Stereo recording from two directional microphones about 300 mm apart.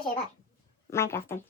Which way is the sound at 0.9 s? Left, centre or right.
Centre.